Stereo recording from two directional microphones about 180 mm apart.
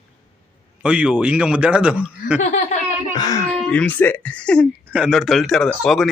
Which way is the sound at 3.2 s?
20° left (ahead or behind).